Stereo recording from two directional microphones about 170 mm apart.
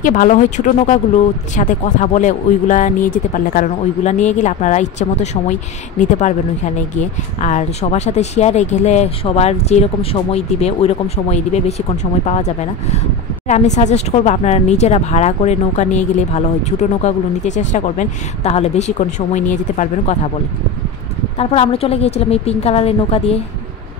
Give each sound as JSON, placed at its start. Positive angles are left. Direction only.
{"t": 0.0, "sound": "speech", "side_deg": 50}
{"t": 21.4, "sound": "speech", "side_deg": 35}